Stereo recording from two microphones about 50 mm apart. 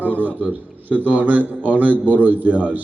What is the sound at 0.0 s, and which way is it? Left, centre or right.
A man's voice, right.